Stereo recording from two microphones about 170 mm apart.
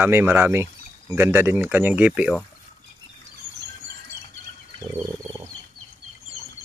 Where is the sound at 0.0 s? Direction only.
10° right (ahead or behind).